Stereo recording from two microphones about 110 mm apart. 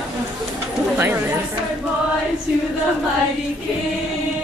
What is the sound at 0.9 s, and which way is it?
Chatter, 20° right (ahead or behind).